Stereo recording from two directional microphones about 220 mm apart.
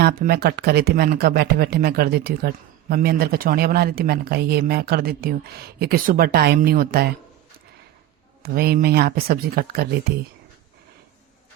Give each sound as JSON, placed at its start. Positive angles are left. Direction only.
{"t": 0.0, "sound": "speech", "side_deg": -45}
{"t": 8.5, "sound": "speech", "side_deg": -45}